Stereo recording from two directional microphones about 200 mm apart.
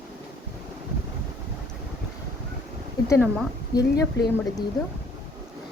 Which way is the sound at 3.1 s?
5° left (ahead or behind).